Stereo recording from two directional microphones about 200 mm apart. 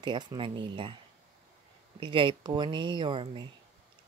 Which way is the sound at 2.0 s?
25° right (ahead or behind).